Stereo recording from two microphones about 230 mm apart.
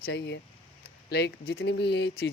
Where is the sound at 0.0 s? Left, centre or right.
Left.